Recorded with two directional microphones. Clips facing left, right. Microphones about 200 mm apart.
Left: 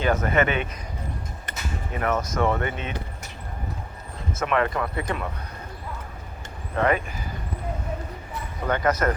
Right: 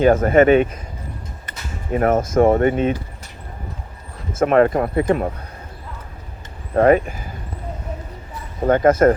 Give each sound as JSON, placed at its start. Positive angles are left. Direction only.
{"t": 0.0, "sound": "speech", "side_deg": -50}
{"t": 1.9, "sound": "speech", "side_deg": -45}
{"t": 4.4, "sound": "speech", "side_deg": -40}
{"t": 6.7, "sound": "speech", "side_deg": -40}
{"t": 8.6, "sound": "speech", "side_deg": -45}